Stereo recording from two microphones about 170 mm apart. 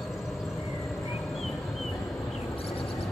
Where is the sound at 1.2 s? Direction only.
Centre (ahead or behind).